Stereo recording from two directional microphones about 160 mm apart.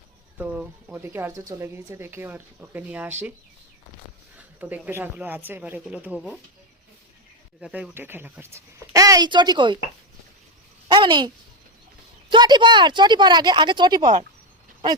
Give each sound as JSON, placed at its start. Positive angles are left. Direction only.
{"t": 0.3, "sound": "speech", "side_deg": -10}
{"t": 4.4, "sound": "speech", "side_deg": -10}
{"t": 7.6, "sound": "speech", "side_deg": -10}
{"t": 10.8, "sound": "speech", "side_deg": -30}
{"t": 12.3, "sound": "speech", "side_deg": -30}